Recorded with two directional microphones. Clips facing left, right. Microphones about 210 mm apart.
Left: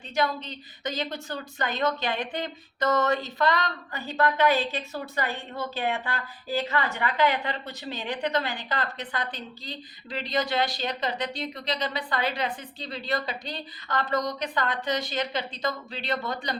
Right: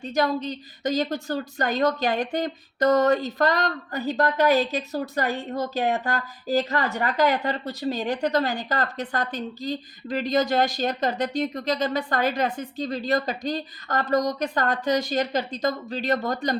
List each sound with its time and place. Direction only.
0.0 s a woman's voice: 40° right (ahead or behind)